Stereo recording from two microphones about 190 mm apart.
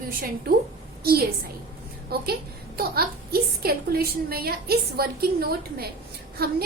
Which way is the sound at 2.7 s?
55° right (ahead or behind).